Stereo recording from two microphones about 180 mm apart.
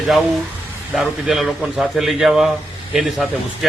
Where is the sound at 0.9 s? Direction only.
Centre (ahead or behind).